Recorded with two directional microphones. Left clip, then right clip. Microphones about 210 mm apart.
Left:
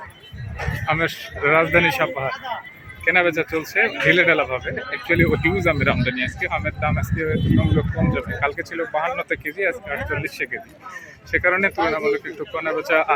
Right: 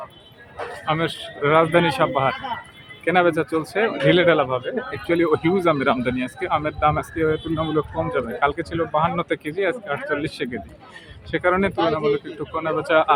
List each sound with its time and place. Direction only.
0.9 s a man's voice: 5° right (ahead or behind)